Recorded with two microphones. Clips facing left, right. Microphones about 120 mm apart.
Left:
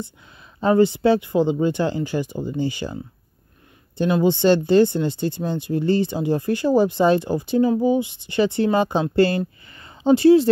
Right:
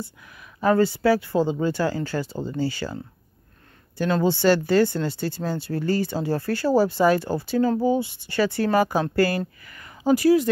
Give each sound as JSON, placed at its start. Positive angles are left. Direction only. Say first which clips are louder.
{"t": 0.6, "sound": "speech", "louder": "left 3 dB", "side_deg": 25}
{"t": 4.0, "sound": "speech", "louder": "left 3 dB", "side_deg": 20}
{"t": 9.7, "sound": "a sound", "louder": "left 3 dB", "side_deg": 25}